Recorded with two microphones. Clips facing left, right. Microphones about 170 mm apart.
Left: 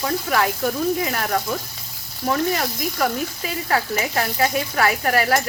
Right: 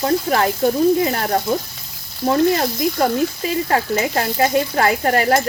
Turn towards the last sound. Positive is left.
turn(degrees=-30)  # may be behind; listen again after turning